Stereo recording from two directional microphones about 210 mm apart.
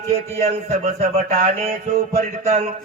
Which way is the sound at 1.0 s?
35° right (ahead or behind).